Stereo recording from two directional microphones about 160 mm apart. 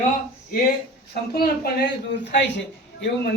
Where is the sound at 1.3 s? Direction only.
80° left.